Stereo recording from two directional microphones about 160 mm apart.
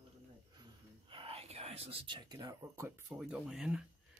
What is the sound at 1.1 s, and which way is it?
Speech, 35° right (ahead or behind).